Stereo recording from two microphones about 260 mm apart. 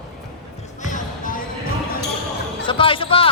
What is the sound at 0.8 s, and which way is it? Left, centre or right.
Music, left.